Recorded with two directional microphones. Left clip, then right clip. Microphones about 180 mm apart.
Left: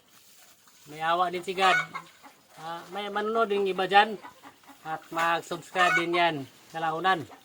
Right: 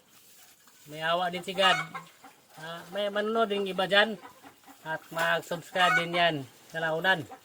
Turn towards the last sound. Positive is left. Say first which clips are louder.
# left 1 dB
turn(degrees=20)  # may be behind; listen again after turning